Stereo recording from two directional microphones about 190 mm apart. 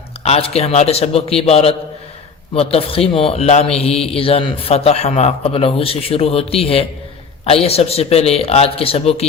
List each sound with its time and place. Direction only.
0.2 s a man's voice: 35° left (ahead or behind)